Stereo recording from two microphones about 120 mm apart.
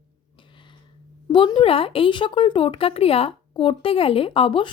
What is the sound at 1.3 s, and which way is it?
A woman's voice, 45° left (ahead or behind).